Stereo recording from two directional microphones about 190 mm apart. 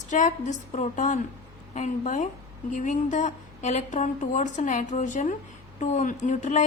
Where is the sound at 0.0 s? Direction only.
40° left (ahead or behind).